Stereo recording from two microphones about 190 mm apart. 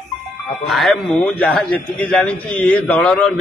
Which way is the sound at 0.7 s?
Centre (ahead or behind).